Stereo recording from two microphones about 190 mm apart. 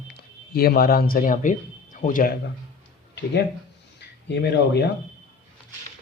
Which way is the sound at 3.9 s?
60° left (ahead or behind).